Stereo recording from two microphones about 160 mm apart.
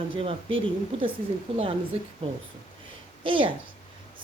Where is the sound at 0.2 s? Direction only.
35° right (ahead or behind).